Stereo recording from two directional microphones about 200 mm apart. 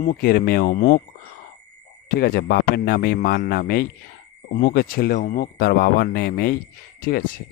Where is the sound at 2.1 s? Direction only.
50° left (ahead or behind).